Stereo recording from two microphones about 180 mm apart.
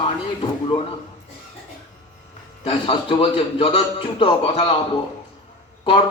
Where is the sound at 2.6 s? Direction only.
30° left (ahead or behind).